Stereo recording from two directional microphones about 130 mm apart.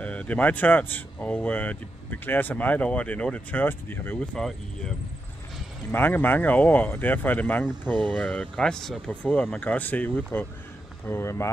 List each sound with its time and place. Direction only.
0.0 s speech: 10° left (ahead or behind)
4.4 s speech: 5° left (ahead or behind)
5.9 s speech: 15° left (ahead or behind)